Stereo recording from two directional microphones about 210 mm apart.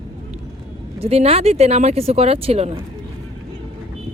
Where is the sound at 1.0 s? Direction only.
30° right (ahead or behind).